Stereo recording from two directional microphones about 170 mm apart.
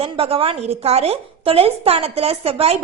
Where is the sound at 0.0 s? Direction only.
35° right (ahead or behind).